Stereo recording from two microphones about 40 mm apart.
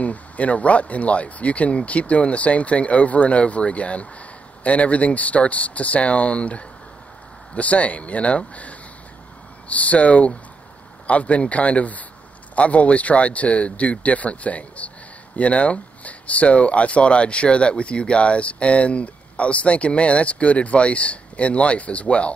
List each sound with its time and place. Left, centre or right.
0.0 s speech: left